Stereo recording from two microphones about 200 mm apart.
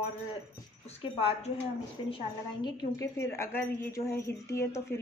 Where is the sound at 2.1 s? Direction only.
25° left (ahead or behind).